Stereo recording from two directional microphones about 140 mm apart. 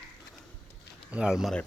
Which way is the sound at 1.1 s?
5° right (ahead or behind).